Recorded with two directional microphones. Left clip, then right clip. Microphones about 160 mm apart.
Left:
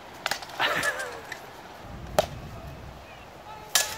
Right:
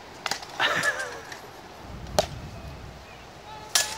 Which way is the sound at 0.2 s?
20° left (ahead or behind).